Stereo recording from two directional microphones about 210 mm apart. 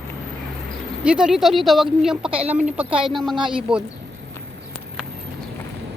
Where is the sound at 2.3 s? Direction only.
25° right (ahead or behind).